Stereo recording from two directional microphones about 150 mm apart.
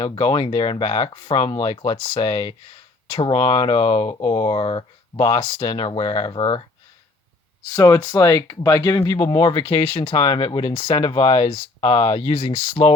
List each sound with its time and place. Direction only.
0.0 s speech: 35° left (ahead or behind)
7.8 s speech: 25° left (ahead or behind)